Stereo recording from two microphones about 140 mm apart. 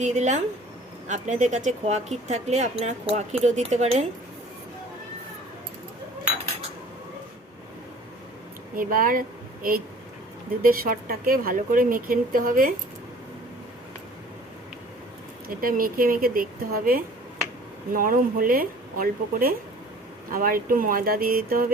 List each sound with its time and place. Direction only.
0.0 s speech: 55° right (ahead or behind)
8.7 s speech: 85° right
10.6 s speech: 90° right
15.4 s speech: 90° right